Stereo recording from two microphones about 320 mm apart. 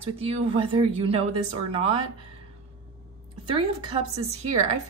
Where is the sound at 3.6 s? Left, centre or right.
Centre.